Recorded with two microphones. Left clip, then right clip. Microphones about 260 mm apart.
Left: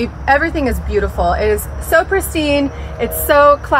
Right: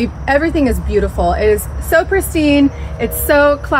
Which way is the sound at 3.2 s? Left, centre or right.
Left.